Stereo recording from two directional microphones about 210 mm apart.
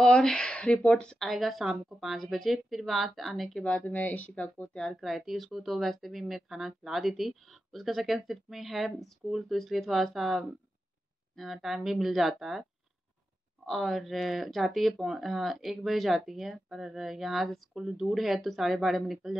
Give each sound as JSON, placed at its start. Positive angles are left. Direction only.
{"t": 0.0, "sound": "speech", "side_deg": 5}
{"t": 13.7, "sound": "speech", "side_deg": 0}